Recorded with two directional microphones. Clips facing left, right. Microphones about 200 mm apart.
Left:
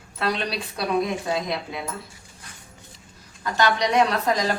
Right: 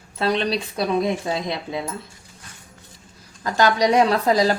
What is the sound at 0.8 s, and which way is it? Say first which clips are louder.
Speech: right 1 dB; 25° right (ahead or behind).